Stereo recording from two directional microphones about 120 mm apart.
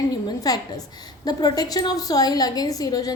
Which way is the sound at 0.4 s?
30° left (ahead or behind).